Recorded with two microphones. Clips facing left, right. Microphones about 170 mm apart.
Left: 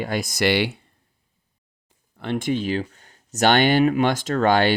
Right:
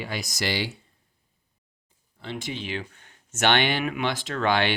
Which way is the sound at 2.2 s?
55° left (ahead or behind).